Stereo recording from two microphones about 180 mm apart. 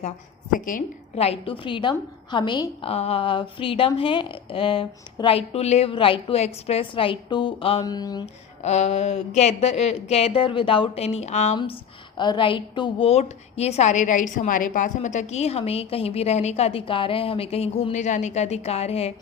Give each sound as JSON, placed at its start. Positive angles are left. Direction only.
{"t": 0.5, "sound": "a woman's voice", "side_deg": 50}
{"t": 1.1, "sound": "a woman's voice", "side_deg": 35}
{"t": 8.6, "sound": "speech", "side_deg": 40}